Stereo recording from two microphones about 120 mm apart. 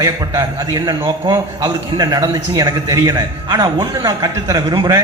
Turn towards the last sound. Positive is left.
turn(degrees=-30)  # may be behind; listen again after turning